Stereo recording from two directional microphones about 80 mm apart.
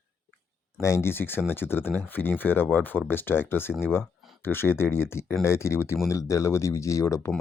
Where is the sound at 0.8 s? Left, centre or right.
Left.